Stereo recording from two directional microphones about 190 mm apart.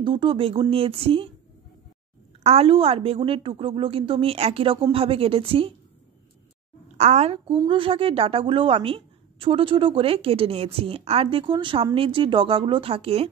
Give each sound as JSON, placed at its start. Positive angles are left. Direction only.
{"t": 0.0, "sound": "a woman's voice", "side_deg": -25}
{"t": 2.4, "sound": "a woman's voice", "side_deg": -30}
{"t": 7.0, "sound": "a woman's voice", "side_deg": -35}